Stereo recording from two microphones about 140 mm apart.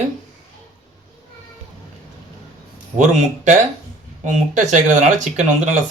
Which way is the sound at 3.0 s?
60° right (ahead or behind).